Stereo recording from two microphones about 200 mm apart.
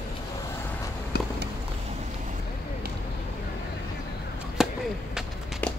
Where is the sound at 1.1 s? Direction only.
55° left (ahead or behind).